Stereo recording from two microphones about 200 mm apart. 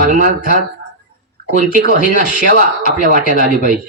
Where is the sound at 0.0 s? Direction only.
40° right (ahead or behind).